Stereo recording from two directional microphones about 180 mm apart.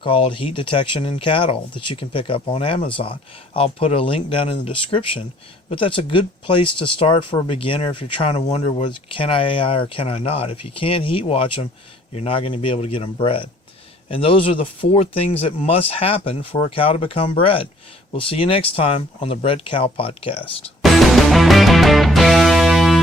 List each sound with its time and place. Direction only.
0.0 s speech: 30° left (ahead or behind)
20.8 s music: centre (ahead or behind)